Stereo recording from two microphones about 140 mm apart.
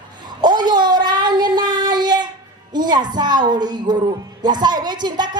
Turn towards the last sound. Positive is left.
turn(degrees=-30)  # may be behind; listen again after turning